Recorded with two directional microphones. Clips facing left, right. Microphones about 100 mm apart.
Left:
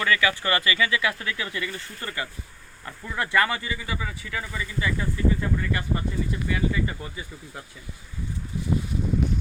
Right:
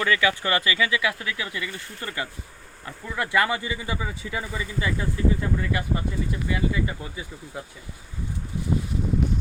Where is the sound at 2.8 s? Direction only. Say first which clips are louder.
Even; 10° right (ahead or behind).